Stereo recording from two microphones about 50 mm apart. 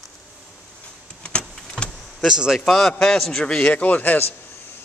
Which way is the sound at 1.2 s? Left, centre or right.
Left.